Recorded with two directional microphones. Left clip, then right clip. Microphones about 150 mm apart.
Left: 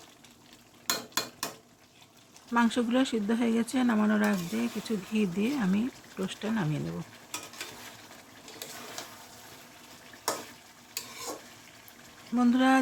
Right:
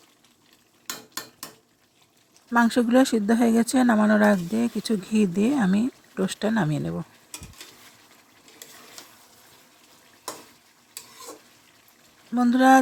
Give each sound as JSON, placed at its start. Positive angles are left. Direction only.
{"t": 2.5, "sound": "speech", "side_deg": -45}
{"t": 12.3, "sound": "speech", "side_deg": -30}